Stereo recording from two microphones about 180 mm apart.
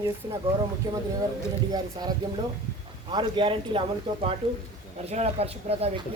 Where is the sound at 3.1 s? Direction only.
25° right (ahead or behind).